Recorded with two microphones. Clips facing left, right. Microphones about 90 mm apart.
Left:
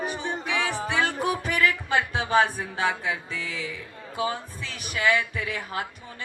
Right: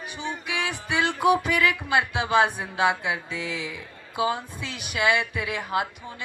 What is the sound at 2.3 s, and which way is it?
A woman's voice, 20° right (ahead or behind).